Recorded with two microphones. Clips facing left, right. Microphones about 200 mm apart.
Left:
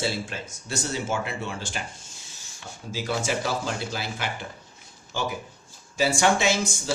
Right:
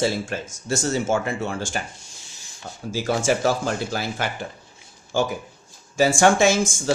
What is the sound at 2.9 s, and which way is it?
Speech, 50° right (ahead or behind).